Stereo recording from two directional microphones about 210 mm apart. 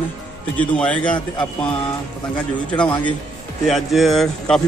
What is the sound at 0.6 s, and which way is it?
Speech, 5° left (ahead or behind).